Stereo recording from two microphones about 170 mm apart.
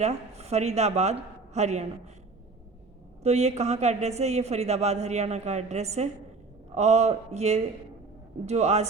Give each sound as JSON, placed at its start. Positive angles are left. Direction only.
{"t": 0.0, "sound": "a woman's voice", "side_deg": -40}
{"t": 3.2, "sound": "speech", "side_deg": -40}